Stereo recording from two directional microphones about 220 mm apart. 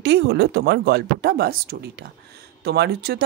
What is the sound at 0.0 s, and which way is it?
A woman's voice, 50° right (ahead or behind).